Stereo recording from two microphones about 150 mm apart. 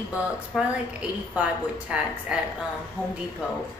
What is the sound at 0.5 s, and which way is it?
A woman's voice, 5° right (ahead or behind).